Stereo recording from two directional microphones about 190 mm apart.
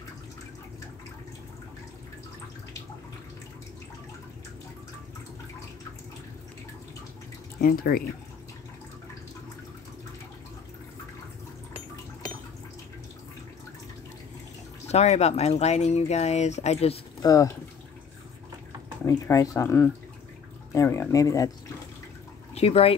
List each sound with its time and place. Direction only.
7.6 s speech: 50° left (ahead or behind)
14.9 s speech: 35° left (ahead or behind)
17.2 s speech: 20° left (ahead or behind)
19.0 s speech: 15° left (ahead or behind)
22.5 s speech: 30° left (ahead or behind)